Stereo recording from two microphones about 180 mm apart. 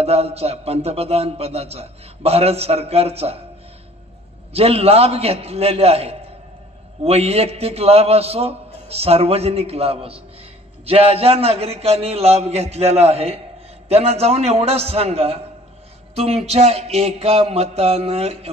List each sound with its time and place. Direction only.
0.0 s a man's voice: 35° right (ahead or behind)
4.6 s a man's voice: 35° right (ahead or behind)